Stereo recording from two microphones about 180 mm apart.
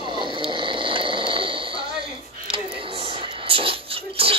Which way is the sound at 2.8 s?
30° right (ahead or behind).